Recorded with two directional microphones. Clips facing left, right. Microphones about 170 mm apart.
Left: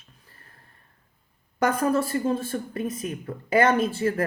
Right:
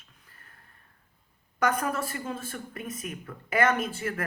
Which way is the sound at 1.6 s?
30° left (ahead or behind).